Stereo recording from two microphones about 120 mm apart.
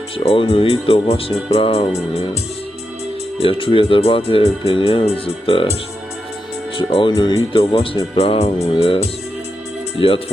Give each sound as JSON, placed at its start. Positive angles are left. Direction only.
{"t": 0.2, "sound": "speech", "side_deg": 50}
{"t": 3.3, "sound": "speech", "side_deg": 50}
{"t": 6.7, "sound": "speech", "side_deg": 45}
{"t": 7.1, "sound": "speech", "side_deg": 30}
{"t": 8.2, "sound": "speech", "side_deg": 55}
{"t": 10.0, "sound": "speech", "side_deg": 50}